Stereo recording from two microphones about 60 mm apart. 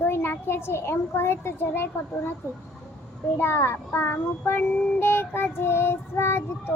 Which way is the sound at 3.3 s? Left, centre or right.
Left.